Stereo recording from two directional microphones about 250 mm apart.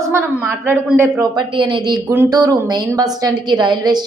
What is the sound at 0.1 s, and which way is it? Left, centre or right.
A woman's voice, centre.